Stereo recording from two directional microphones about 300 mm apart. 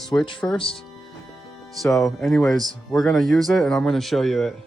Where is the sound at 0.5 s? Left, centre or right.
Centre.